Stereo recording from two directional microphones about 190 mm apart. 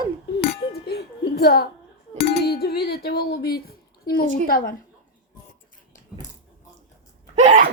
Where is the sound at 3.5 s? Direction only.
55° left (ahead or behind).